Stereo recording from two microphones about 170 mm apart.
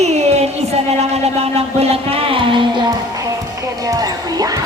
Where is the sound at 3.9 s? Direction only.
20° right (ahead or behind).